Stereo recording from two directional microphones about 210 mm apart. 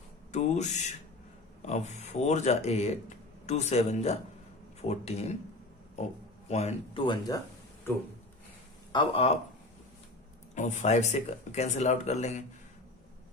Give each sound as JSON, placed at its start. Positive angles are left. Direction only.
{"t": 0.3, "sound": "speech", "side_deg": 35}
{"t": 6.5, "sound": "speech", "side_deg": 30}
{"t": 8.9, "sound": "speech", "side_deg": 25}
{"t": 10.5, "sound": "speech", "side_deg": 35}